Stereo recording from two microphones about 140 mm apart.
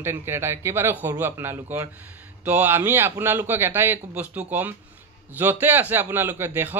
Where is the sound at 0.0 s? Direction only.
15° right (ahead or behind).